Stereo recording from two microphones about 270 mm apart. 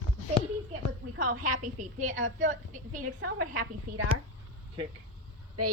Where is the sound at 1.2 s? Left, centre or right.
Right.